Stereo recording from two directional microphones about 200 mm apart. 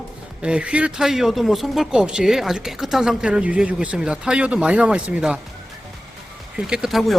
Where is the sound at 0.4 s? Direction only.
5° right (ahead or behind).